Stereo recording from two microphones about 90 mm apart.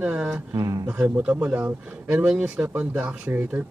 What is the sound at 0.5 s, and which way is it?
Speech, 40° right (ahead or behind).